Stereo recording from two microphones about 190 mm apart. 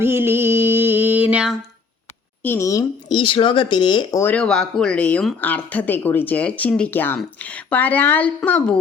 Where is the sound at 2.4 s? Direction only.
15° left (ahead or behind).